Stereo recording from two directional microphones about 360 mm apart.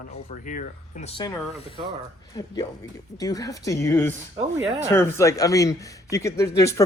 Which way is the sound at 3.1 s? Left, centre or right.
Centre.